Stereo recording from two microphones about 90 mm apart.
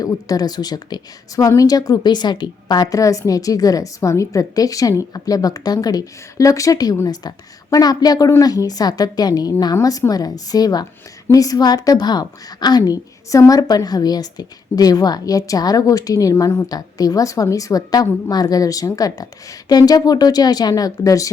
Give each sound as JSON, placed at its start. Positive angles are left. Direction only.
{"t": 0.0, "sound": "a woman's voice", "side_deg": 45}
{"t": 16.6, "sound": "a woman's voice", "side_deg": 45}